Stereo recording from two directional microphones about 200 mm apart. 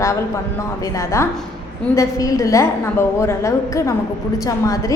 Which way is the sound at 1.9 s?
15° left (ahead or behind).